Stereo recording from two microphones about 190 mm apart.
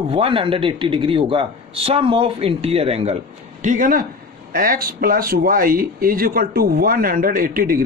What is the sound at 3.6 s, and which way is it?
Speech, 45° right (ahead or behind).